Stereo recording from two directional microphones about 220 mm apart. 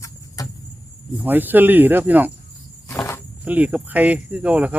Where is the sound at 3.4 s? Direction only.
5° right (ahead or behind).